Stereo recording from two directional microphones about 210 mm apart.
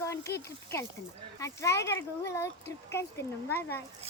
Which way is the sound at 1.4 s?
15° left (ahead or behind).